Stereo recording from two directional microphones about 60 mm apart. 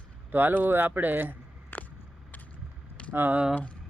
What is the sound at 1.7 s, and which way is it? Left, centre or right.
Vehicle, left.